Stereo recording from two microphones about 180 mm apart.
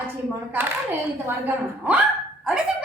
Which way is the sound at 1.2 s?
10° right (ahead or behind).